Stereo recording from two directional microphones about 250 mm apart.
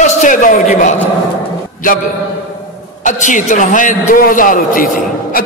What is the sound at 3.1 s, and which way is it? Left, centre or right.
A man's voice, left.